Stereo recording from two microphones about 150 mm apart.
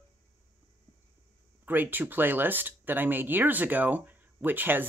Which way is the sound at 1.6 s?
10° right (ahead or behind).